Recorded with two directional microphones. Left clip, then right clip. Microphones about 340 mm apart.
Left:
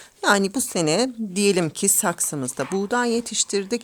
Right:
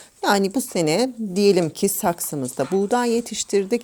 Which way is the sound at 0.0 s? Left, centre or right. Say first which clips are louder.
Even; centre.